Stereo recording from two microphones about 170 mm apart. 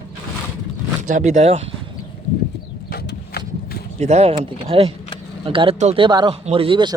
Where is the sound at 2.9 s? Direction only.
70° left (ahead or behind).